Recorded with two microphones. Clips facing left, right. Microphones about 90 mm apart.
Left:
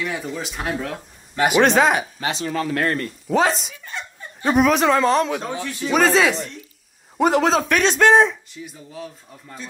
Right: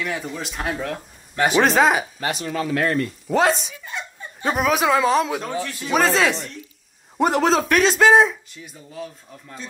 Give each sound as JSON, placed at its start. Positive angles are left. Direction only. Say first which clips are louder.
{"t": 0.0, "sound": "a man's voice", "louder": "left 1 dB", "side_deg": 0}
{"t": 2.4, "sound": "speech", "louder": "even", "side_deg": 45}
{"t": 3.3, "sound": "a man's voice", "louder": "left 1 dB", "side_deg": 0}
{"t": 5.5, "sound": "a man's voice", "louder": "even", "side_deg": 15}
{"t": 5.9, "sound": "a man's voice", "louder": "left 2 dB", "side_deg": 0}